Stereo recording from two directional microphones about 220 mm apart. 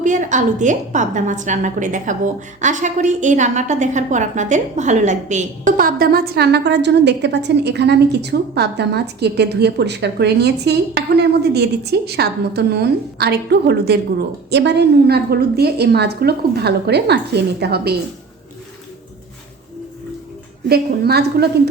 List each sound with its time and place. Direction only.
0.0 s a woman's voice: 35° right (ahead or behind)
20.7 s a woman's voice: 45° right (ahead or behind)